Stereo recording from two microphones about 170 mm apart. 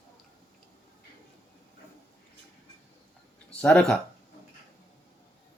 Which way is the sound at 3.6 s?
5° left (ahead or behind).